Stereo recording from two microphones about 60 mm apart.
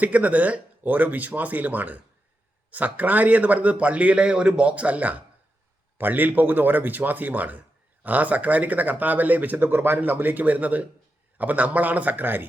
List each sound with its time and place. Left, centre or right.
0.0 s speech: right